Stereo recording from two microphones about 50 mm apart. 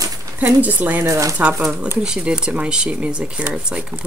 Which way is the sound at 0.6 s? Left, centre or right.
Right.